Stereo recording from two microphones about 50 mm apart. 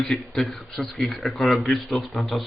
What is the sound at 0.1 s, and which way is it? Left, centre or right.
Speech, centre.